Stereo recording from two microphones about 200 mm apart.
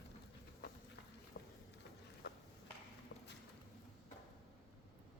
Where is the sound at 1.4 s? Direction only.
55° left (ahead or behind).